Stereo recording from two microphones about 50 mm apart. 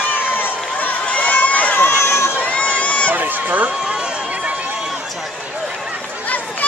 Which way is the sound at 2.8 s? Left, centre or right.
Left.